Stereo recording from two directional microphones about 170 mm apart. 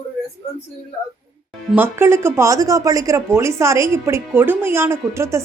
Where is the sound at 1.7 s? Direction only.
15° right (ahead or behind).